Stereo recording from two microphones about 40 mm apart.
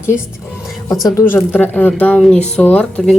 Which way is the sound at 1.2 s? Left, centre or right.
Left.